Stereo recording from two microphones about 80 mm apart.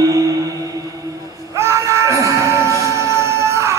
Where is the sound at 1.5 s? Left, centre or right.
Right.